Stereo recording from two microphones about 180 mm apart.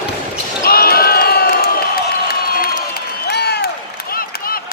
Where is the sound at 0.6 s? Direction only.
55° left (ahead or behind).